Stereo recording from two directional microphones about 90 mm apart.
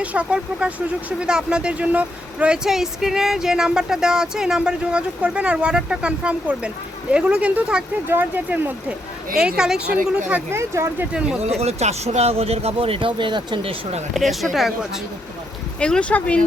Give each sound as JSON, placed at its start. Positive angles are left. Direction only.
{"t": 0.0, "sound": "speech", "side_deg": -15}
{"t": 9.4, "sound": "speech", "side_deg": -10}
{"t": 10.5, "sound": "speech", "side_deg": -30}
{"t": 12.3, "sound": "speech", "side_deg": -90}
{"t": 14.1, "sound": "speech", "side_deg": 0}
{"t": 15.8, "sound": "speech", "side_deg": 10}